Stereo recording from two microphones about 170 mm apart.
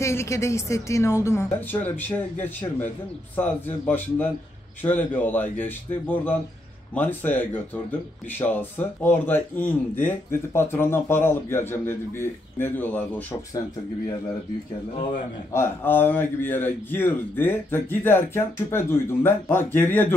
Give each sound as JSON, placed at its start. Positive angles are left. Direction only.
{"t": 0.0, "sound": "speech", "side_deg": 15}
{"t": 15.5, "sound": "speech", "side_deg": 15}